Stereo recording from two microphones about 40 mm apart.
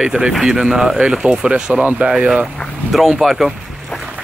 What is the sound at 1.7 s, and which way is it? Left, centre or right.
Speech, right.